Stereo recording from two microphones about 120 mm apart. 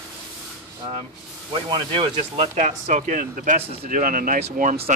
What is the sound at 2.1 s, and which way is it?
Speech, 65° right (ahead or behind).